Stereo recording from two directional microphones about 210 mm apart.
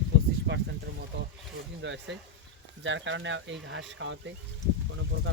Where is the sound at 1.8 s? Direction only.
60° right (ahead or behind).